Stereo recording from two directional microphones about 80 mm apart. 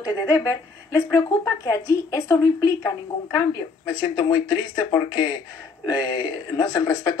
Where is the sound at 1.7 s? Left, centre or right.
Left.